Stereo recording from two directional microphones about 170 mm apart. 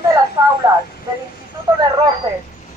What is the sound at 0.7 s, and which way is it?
Speech, 20° right (ahead or behind).